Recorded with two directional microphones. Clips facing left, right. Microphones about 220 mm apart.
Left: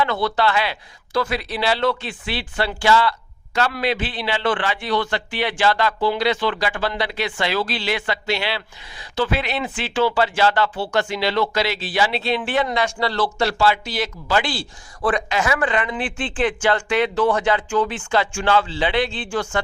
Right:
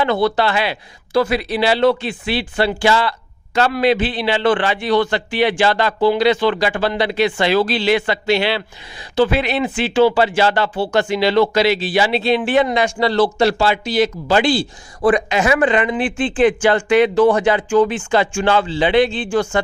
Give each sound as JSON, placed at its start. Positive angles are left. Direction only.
{"t": 0.0, "sound": "speech", "side_deg": -20}